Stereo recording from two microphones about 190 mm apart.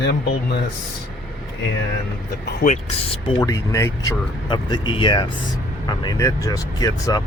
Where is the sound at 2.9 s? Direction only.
30° left (ahead or behind).